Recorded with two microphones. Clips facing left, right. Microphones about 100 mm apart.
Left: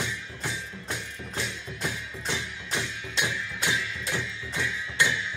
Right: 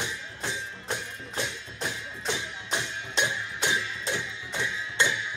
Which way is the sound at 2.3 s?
20° right (ahead or behind).